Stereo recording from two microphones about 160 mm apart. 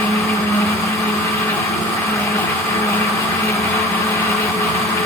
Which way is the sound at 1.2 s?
20° left (ahead or behind).